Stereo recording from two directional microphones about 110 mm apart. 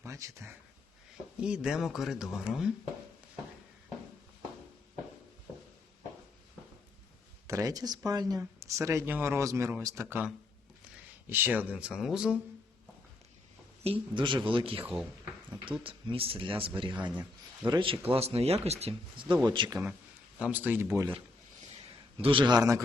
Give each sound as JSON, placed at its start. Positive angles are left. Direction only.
{"t": 0.0, "sound": "speech", "side_deg": -25}
{"t": 1.4, "sound": "speech", "side_deg": -10}
{"t": 7.4, "sound": "speech", "side_deg": -30}
{"t": 11.3, "sound": "speech", "side_deg": -20}
{"t": 13.8, "sound": "a man's voice", "side_deg": -65}
{"t": 14.2, "sound": "a man's voice", "side_deg": -45}
{"t": 16.9, "sound": "speech", "side_deg": -15}
{"t": 17.7, "sound": "a man's voice", "side_deg": -50}
{"t": 20.4, "sound": "speech", "side_deg": -15}
{"t": 22.2, "sound": "speech", "side_deg": -50}